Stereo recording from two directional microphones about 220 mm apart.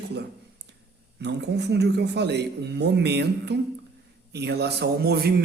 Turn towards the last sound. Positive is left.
turn(degrees=-45)  # may be behind; listen again after turning